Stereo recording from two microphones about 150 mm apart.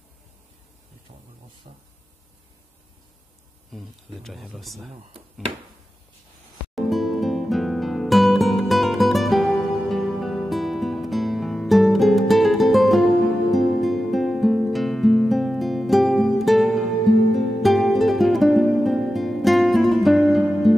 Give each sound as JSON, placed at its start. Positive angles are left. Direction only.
{"t": 3.7, "sound": "speech", "side_deg": 0}
{"t": 6.7, "sound": "music", "side_deg": 0}